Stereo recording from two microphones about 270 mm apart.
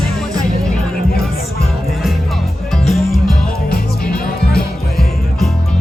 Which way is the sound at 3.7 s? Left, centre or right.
Left.